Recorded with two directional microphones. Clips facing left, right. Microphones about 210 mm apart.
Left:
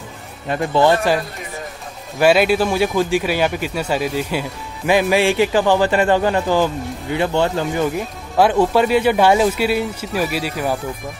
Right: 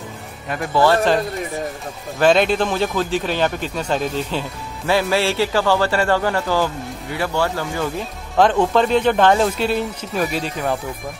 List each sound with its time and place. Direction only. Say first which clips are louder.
0.5 s speech: left 2 dB; 25° left (ahead or behind)
2.1 s speech: left 1 dB; 10° left (ahead or behind)
8.4 s speech: left 1 dB; 10° left (ahead or behind)